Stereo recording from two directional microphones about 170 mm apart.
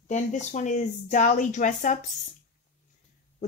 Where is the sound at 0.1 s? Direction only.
45° left (ahead or behind).